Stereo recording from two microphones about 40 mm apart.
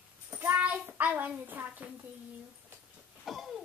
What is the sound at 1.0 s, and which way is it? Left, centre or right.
Speech, right.